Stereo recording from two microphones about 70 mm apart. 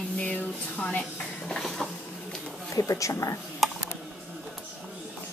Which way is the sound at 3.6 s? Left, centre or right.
Centre.